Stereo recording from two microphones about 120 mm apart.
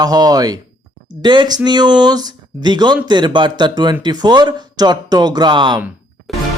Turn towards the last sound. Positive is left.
turn(degrees=0)  # may be behind; listen again after turning